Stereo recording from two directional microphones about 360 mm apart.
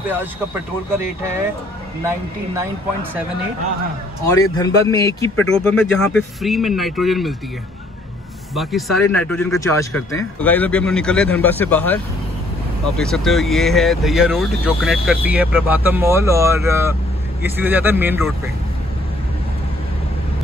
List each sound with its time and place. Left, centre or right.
2.0 s speech: centre
4.3 s a man's voice: centre
8.5 s speech: centre